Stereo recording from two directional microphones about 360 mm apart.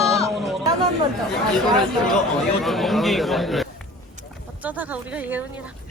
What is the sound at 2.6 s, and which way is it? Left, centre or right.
Speech, centre.